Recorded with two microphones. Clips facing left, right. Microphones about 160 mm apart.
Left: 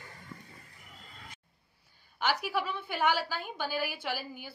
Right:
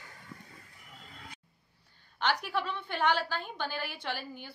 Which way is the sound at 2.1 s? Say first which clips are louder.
Even; 10° left (ahead or behind).